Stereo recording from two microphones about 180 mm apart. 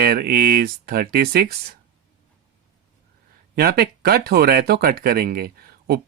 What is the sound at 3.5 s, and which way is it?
Speech, 60° right (ahead or behind).